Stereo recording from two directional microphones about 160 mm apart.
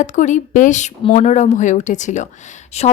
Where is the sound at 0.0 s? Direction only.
50° left (ahead or behind).